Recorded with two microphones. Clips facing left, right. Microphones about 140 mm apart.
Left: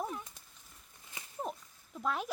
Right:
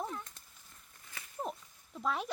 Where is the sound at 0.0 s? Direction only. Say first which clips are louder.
Left 1 dB; 10° left (ahead or behind).